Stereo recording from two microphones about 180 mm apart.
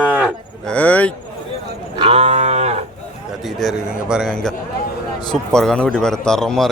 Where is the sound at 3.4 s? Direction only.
Centre (ahead or behind).